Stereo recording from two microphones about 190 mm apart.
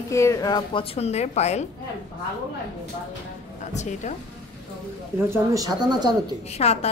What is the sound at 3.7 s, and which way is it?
Speech, 40° left (ahead or behind).